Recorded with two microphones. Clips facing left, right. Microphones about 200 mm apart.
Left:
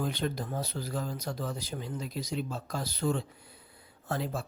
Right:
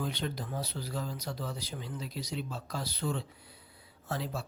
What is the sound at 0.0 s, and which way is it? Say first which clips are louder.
Speech: left 3 dB; 50° left (ahead or behind).